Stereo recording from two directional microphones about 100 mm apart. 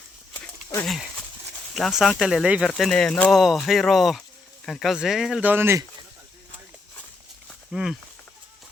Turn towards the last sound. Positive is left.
turn(degrees=-5)  # may be behind; listen again after turning